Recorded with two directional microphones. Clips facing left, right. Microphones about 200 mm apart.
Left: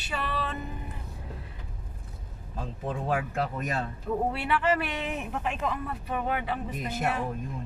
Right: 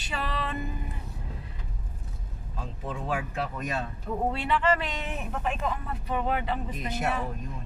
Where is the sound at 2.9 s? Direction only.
50° left (ahead or behind).